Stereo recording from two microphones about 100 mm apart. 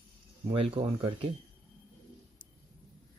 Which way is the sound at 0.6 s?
65° right (ahead or behind).